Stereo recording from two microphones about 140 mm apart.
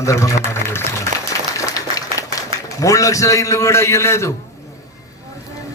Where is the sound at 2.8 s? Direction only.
25° left (ahead or behind).